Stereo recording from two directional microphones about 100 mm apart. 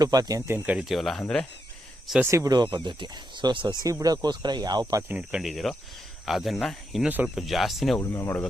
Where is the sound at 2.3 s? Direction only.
30° right (ahead or behind).